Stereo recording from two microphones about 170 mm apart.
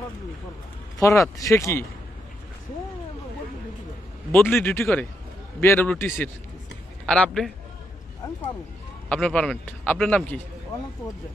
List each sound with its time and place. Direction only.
0.9 s a man's voice: 20° left (ahead or behind)
4.3 s a man's voice: 15° left (ahead or behind)
9.1 s a man's voice: 5° left (ahead or behind)